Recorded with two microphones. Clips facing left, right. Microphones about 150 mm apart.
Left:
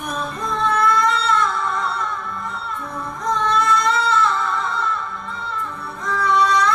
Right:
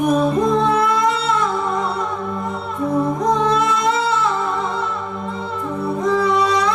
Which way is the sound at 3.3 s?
5° right (ahead or behind).